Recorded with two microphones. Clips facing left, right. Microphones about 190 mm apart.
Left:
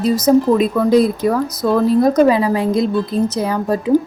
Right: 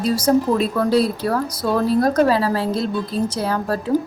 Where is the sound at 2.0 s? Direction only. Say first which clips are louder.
Left 4 dB; 15° left (ahead or behind).